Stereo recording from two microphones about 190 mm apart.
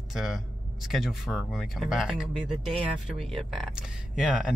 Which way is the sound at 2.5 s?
25° right (ahead or behind).